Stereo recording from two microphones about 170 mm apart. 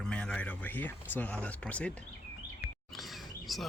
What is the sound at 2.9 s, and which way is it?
Chirp, centre (ahead or behind).